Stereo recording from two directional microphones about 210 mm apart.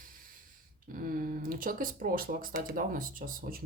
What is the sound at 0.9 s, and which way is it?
Speech, 40° right (ahead or behind).